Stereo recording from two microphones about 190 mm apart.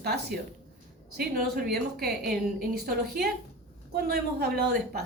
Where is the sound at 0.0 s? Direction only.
55° right (ahead or behind).